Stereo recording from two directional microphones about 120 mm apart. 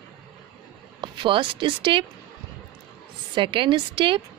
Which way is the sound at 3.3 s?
45° right (ahead or behind).